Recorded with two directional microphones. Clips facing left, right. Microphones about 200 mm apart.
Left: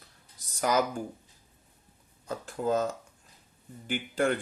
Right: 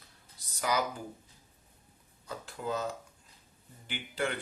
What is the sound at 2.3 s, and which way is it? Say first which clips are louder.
Speech: left 7 dB; 45° left (ahead or behind).